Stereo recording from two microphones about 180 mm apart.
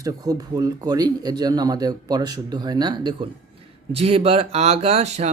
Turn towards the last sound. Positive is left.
turn(degrees=-35)  # may be behind; listen again after turning